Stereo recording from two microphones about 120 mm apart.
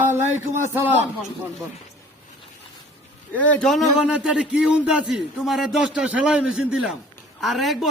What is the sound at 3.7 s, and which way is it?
A man's voice, centre (ahead or behind).